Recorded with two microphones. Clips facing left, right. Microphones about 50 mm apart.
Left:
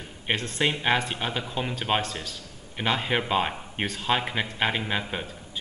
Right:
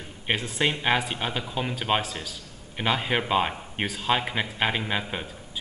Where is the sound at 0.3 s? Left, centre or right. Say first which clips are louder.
Even; centre.